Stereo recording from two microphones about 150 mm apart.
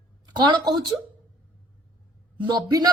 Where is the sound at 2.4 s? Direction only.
30° right (ahead or behind).